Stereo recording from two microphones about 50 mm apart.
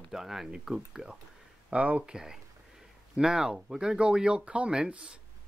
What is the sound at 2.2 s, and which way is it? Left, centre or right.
Speech, centre.